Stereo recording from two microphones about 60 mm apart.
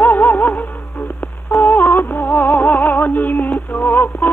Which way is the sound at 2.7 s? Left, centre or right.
Left.